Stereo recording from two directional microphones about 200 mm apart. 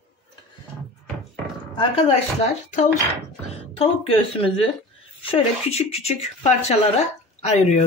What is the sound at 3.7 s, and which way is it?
Speech, 25° left (ahead or behind).